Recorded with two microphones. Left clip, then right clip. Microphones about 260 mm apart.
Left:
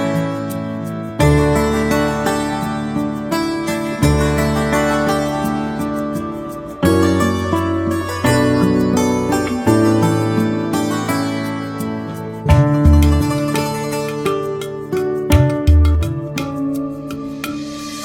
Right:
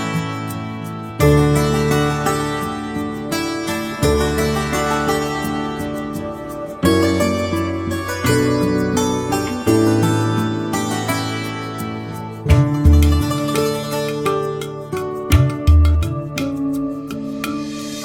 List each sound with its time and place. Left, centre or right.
0.0 s music: centre
6.8 s music: centre
12.5 s music: centre